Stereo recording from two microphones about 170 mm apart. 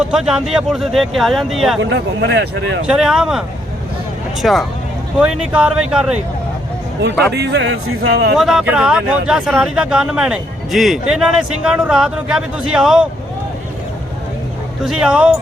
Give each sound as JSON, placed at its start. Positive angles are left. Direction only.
{"t": 0.0, "sound": "speech", "side_deg": -5}
{"t": 1.8, "sound": "speech", "side_deg": -90}
{"t": 2.8, "sound": "speech", "side_deg": -5}
{"t": 4.4, "sound": "speech", "side_deg": 0}
{"t": 7.3, "sound": "speech", "side_deg": -80}
{"t": 8.4, "sound": "speech", "side_deg": 0}
{"t": 14.8, "sound": "speech", "side_deg": -5}